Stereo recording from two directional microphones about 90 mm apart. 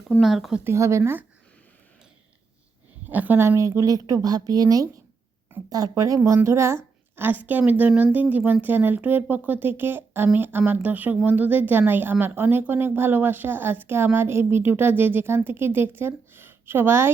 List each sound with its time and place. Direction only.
0.2 s speech: centre (ahead or behind)
0.6 s speech: 30° right (ahead or behind)
3.1 s a woman's voice: 20° right (ahead or behind)